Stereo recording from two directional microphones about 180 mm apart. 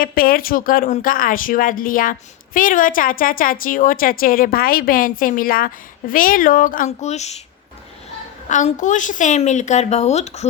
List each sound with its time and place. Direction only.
0.0 s speech: 55° left (ahead or behind)
8.4 s a woman's voice: 45° left (ahead or behind)